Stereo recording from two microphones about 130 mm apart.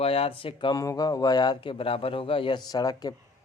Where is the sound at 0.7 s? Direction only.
25° left (ahead or behind).